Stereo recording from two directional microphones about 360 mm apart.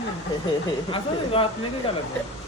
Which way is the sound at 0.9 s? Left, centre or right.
Centre.